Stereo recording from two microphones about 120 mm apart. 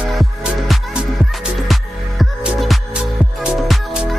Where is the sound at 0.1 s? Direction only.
Centre (ahead or behind).